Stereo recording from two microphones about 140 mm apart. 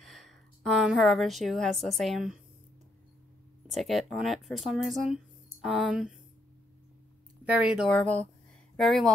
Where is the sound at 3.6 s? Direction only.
Centre (ahead or behind).